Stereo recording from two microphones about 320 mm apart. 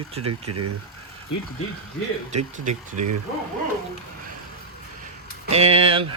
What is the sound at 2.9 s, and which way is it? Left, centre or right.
Speech, right.